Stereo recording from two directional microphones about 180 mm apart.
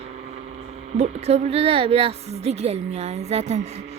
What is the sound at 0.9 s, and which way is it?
A woman's voice, 40° right (ahead or behind).